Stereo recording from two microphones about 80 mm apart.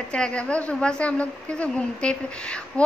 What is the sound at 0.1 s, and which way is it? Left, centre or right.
A woman's voice, centre.